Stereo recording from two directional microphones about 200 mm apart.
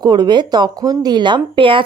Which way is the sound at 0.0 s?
20° right (ahead or behind).